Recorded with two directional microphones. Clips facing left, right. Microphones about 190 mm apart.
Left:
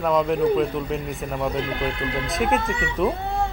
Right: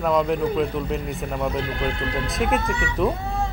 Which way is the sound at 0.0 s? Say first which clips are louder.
Left 1 dB; centre (ahead or behind).